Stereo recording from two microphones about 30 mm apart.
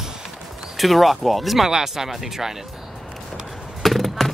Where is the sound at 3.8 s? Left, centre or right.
Centre.